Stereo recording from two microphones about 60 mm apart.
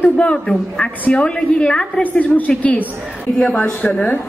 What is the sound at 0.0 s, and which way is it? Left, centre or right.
A woman's voice, centre.